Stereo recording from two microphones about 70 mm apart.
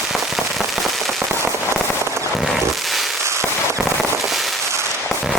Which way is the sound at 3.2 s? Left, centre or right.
Right.